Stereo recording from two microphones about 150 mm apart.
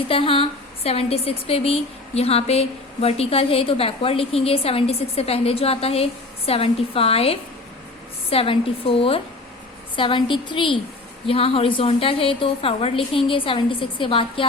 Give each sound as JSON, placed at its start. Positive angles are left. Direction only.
{"t": 0.1, "sound": "a woman's voice", "side_deg": 35}